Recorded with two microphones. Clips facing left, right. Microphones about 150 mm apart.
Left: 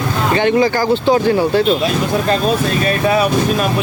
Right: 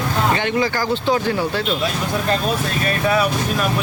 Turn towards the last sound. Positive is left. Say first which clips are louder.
# left 5 dB
turn(degrees=20)  # may be behind; listen again after turning